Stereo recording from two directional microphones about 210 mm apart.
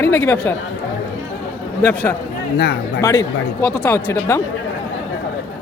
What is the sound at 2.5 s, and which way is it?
Speech, 50° left (ahead or behind).